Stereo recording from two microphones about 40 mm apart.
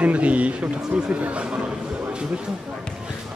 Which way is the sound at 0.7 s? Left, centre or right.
Centre.